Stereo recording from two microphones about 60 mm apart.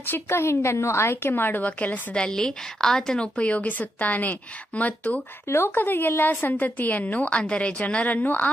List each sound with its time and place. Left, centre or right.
0.0 s a woman's voice: left
2.1 s a woman's voice: centre
5.5 s a woman's voice: left
6.5 s a woman's voice: left